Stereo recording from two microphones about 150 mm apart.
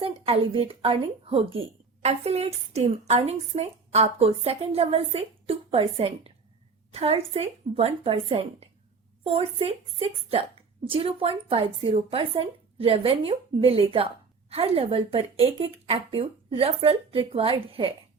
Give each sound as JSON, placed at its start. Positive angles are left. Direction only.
{"t": 0.0, "sound": "speech", "side_deg": -40}